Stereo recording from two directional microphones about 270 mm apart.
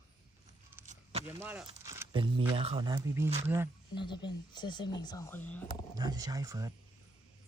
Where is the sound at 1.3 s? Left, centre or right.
Centre.